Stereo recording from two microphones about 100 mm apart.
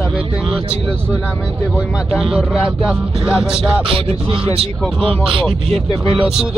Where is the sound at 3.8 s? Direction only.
65° right (ahead or behind).